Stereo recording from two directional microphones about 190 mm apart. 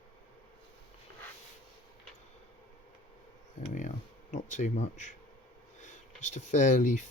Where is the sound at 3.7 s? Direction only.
40° left (ahead or behind).